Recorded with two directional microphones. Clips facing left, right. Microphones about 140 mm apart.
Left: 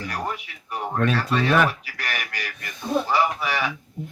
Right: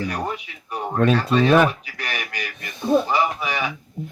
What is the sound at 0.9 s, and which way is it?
Speech, 25° right (ahead or behind).